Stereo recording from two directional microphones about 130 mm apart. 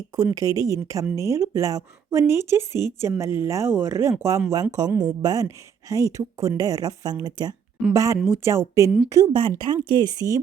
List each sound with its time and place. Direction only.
0.3 s a woman's voice: 25° right (ahead or behind)